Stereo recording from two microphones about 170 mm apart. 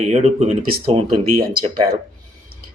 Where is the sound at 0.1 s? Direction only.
40° right (ahead or behind).